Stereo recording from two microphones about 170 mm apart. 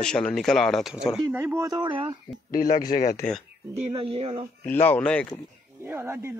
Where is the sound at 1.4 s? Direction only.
15° right (ahead or behind).